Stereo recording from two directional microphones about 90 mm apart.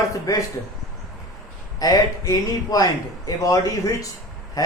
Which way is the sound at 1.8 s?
45° left (ahead or behind).